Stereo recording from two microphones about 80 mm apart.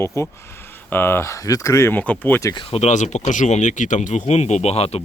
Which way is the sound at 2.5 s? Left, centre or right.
Left.